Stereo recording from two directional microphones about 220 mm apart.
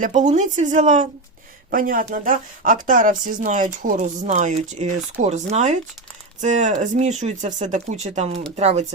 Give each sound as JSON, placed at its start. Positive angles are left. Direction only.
{"t": 0.0, "sound": "speech", "side_deg": -35}